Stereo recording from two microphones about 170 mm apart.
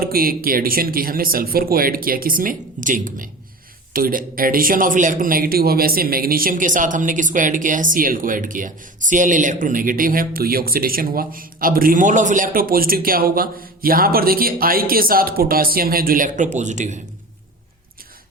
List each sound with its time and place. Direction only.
0.0 s speech: 60° right (ahead or behind)